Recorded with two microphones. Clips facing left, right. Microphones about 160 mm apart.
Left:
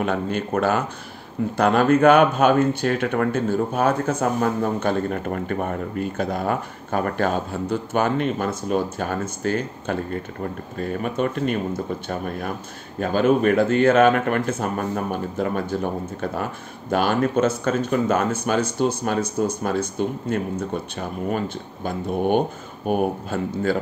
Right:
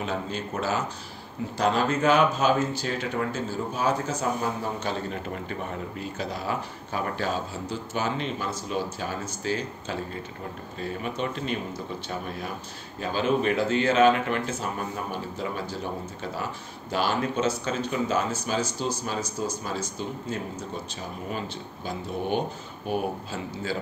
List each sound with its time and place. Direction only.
0.0 s speech: 60° left (ahead or behind)